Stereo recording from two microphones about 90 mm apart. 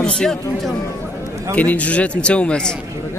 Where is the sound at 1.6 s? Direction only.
15° left (ahead or behind).